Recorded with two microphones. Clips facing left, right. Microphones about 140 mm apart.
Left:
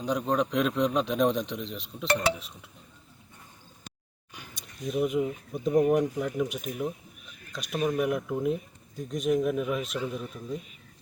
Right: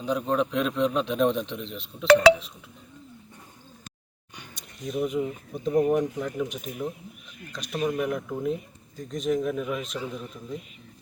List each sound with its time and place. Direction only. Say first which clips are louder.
0.0 s a man's voice: right 1 dB; centre (ahead or behind)
2.0 s speech: right 11 dB; 90° right
4.8 s a man's voice: left 1 dB; 5° left (ahead or behind)